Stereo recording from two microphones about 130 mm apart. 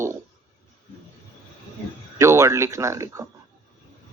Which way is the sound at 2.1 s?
20° right (ahead or behind).